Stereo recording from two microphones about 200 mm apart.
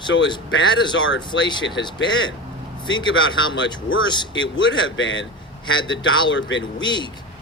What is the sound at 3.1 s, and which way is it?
Speech, 75° left (ahead or behind).